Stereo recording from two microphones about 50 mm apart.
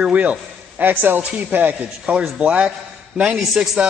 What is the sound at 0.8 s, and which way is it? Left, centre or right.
A man's voice, right.